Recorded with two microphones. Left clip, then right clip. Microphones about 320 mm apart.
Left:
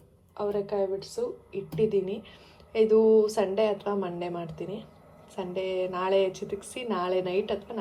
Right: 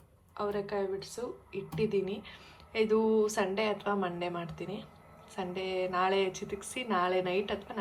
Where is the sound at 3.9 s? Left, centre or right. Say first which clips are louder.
Left 2 dB; right.